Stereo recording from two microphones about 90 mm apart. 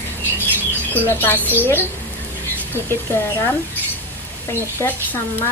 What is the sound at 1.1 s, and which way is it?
Speech, 20° left (ahead or behind).